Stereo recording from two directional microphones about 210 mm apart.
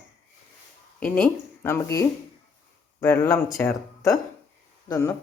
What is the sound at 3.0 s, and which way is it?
Speech, 10° left (ahead or behind).